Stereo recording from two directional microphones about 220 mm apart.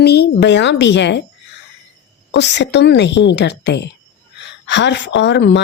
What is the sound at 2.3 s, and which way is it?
A woman's voice, 50° left (ahead or behind).